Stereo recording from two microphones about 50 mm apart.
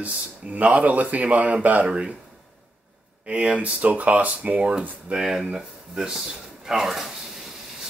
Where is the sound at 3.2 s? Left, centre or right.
Right.